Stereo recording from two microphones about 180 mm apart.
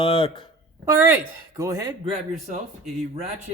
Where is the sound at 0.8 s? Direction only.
15° right (ahead or behind).